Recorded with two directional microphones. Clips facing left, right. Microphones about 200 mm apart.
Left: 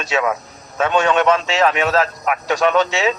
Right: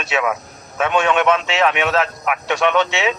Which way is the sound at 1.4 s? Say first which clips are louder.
Left 1 dB; 35° left (ahead or behind).